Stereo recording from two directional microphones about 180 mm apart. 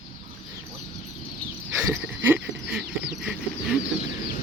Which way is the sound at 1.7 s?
10° right (ahead or behind).